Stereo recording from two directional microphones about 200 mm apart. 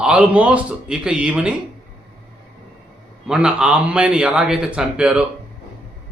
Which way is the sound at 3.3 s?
5° right (ahead or behind).